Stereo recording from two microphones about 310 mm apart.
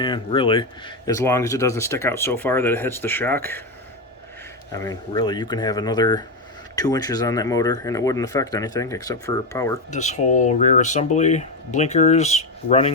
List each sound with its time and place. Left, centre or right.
0.0 s speech: centre
4.7 s speech: centre
9.9 s speech: left